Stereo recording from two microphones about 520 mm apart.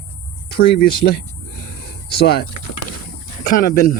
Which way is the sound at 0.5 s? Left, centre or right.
Centre.